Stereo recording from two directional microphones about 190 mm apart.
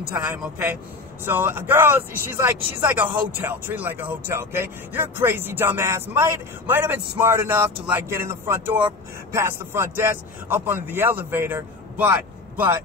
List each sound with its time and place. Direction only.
0.1 s speech: 10° right (ahead or behind)